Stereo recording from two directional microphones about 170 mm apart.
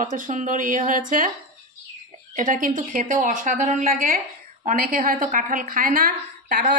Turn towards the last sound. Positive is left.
turn(degrees=-60)  # may be behind; listen again after turning